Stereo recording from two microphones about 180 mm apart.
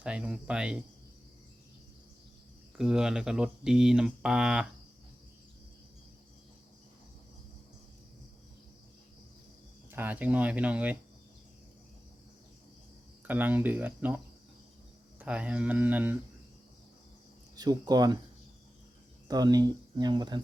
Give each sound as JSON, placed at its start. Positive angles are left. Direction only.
{"t": 0.0, "sound": "speech", "side_deg": -5}
{"t": 2.7, "sound": "speech", "side_deg": -5}
{"t": 9.9, "sound": "speech", "side_deg": -10}
{"t": 13.2, "sound": "speech", "side_deg": -10}
{"t": 15.2, "sound": "speech", "side_deg": -5}
{"t": 17.6, "sound": "speech", "side_deg": -20}
{"t": 19.3, "sound": "speech", "side_deg": -20}